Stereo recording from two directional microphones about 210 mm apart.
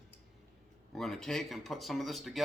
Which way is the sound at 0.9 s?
Centre (ahead or behind).